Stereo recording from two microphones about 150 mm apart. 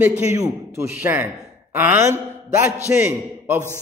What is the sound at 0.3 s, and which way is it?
A man's voice, 20° right (ahead or behind).